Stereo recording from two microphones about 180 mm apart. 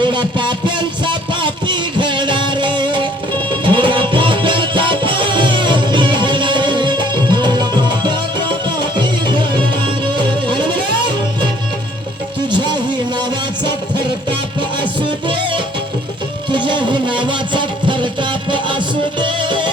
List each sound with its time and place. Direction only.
0.0 s a sound: 25° right (ahead or behind)
3.6 s music: 30° right (ahead or behind)
9.8 s music: 25° right (ahead or behind)
12.5 s music: 25° right (ahead or behind)
15.3 s music: 25° right (ahead or behind)
16.5 s a sound: 25° right (ahead or behind)
19.2 s music: 25° right (ahead or behind)